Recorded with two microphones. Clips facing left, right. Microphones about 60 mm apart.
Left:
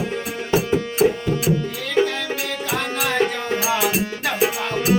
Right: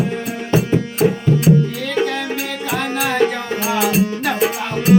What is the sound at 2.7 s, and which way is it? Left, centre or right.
Music, centre.